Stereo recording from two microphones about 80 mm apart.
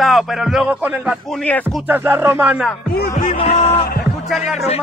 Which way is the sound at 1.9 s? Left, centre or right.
Right.